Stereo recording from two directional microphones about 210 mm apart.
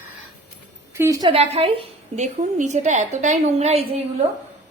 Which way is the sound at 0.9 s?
15° right (ahead or behind).